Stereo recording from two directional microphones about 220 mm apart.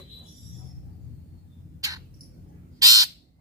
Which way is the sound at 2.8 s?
15° right (ahead or behind).